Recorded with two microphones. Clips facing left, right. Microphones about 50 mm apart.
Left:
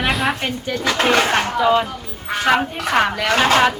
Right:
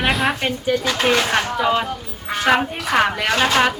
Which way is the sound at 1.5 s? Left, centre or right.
Centre.